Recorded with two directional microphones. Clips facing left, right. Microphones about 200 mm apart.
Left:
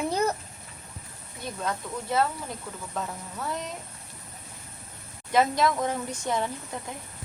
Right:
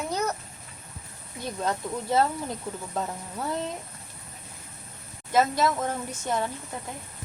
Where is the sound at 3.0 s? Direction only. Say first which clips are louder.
Right 1 dB; 30° right (ahead or behind).